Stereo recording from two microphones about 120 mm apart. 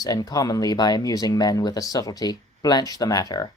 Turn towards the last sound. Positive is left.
turn(degrees=30)  # may be behind; listen again after turning